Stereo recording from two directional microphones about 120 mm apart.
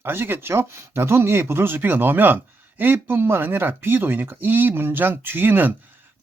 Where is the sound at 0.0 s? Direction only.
20° right (ahead or behind).